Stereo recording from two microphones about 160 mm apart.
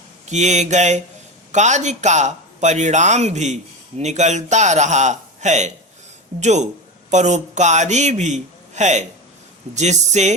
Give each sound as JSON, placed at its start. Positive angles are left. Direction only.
{"t": 0.3, "sound": "a man's voice", "side_deg": -45}